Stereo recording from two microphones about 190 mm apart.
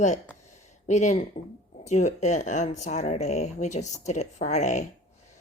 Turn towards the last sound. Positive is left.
turn(degrees=35)  # may be behind; listen again after turning